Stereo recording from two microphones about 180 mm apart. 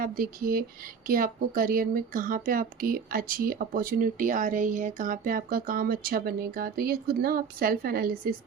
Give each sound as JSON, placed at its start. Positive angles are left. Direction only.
{"t": 0.0, "sound": "speech", "side_deg": -55}